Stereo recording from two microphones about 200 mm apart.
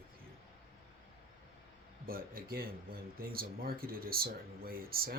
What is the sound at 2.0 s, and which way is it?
Speech, 45° right (ahead or behind).